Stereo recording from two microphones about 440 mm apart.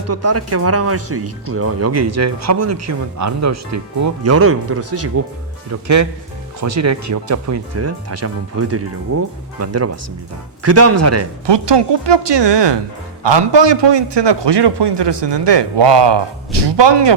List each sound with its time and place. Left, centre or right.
0.1 s speech: right
6.6 s speech: right
11.4 s a man's voice: right